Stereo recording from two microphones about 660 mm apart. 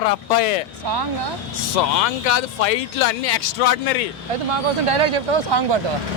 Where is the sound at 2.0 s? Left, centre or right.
Left.